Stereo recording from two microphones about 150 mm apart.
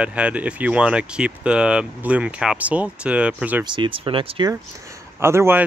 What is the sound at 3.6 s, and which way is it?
Speech, 30° right (ahead or behind).